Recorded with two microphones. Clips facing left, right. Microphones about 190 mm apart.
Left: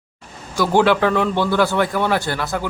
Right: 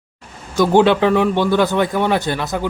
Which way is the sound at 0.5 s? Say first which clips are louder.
Right 3 dB; 20° right (ahead or behind).